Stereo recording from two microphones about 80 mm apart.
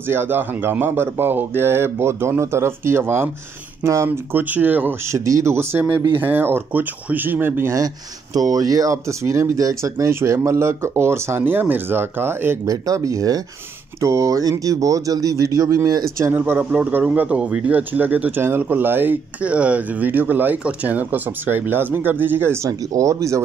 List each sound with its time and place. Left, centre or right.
0.1 s speech: right
5.1 s speech: right
8.4 s speech: right
12.6 s speech: right
22.7 s speech: right